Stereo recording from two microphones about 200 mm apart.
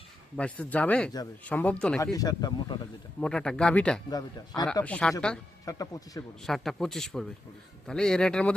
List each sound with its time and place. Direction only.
0.3 s speech: 5° left (ahead or behind)
2.1 s speech: 20° left (ahead or behind)
3.2 s speech: 5° left (ahead or behind)
4.1 s speech: 20° left (ahead or behind)
4.6 s speech: 5° left (ahead or behind)
5.6 s speech: 15° left (ahead or behind)
6.4 s speech: centre (ahead or behind)